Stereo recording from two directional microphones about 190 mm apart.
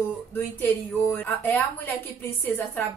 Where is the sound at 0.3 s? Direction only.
10° left (ahead or behind).